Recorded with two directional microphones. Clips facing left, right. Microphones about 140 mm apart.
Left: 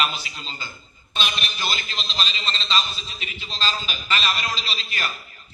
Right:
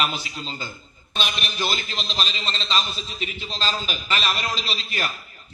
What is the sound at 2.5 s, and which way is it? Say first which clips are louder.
A man's voice: left 1 dB; 5° right (ahead or behind).